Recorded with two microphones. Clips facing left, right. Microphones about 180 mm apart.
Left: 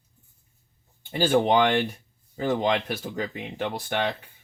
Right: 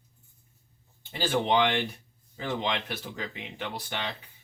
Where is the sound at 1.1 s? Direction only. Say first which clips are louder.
Left 5 dB; 50° left (ahead or behind).